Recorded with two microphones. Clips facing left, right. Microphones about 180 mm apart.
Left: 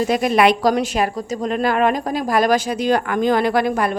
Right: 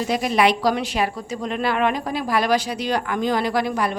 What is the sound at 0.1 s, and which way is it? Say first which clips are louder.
A woman's voice: left 2 dB; 55° left (ahead or behind).